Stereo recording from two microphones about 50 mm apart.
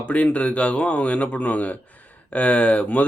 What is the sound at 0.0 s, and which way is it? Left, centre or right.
Speech, left.